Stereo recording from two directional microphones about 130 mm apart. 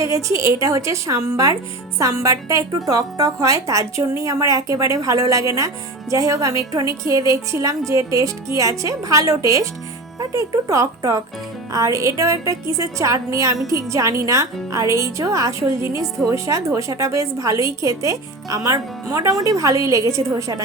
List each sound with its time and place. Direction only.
0.0 s speech: 25° right (ahead or behind)